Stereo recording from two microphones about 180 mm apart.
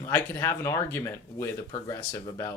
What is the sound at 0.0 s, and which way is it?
Speech, 15° left (ahead or behind).